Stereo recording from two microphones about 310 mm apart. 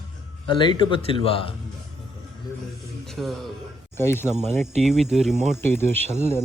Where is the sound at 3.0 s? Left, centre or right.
Centre.